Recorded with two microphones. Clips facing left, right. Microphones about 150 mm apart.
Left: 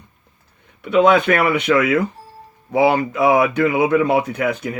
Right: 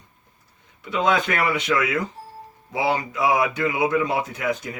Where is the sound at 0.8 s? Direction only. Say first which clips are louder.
Left 8 dB; 60° left (ahead or behind).